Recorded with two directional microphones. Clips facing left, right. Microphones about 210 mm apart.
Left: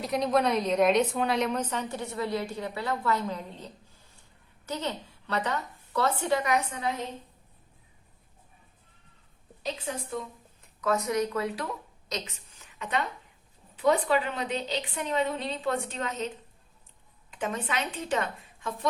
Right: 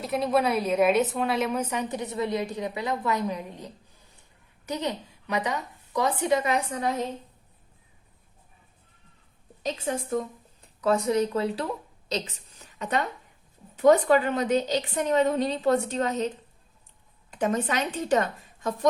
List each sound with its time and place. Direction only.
0.0 s a woman's voice: 5° right (ahead or behind); by 6.9 s 40° right (ahead or behind)
9.7 s a woman's voice: 45° right (ahead or behind)
10.8 s a woman's voice: 30° right (ahead or behind)
17.3 s a woman's voice: 40° right (ahead or behind)